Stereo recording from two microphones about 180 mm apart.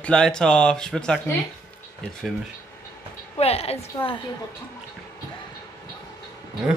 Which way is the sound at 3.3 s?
35° left (ahead or behind).